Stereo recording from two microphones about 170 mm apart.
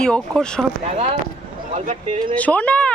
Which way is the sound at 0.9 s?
40° right (ahead or behind).